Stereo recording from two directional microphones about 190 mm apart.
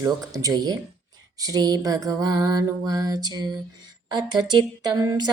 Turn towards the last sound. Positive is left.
turn(degrees=-20)  # may be behind; listen again after turning